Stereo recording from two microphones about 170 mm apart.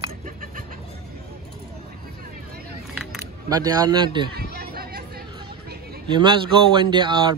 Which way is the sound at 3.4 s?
20° right (ahead or behind).